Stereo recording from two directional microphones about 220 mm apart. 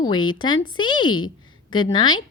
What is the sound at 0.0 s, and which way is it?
Speech, 20° left (ahead or behind).